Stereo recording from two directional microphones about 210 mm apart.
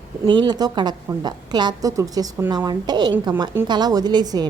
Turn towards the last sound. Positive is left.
turn(degrees=-20)  # may be behind; listen again after turning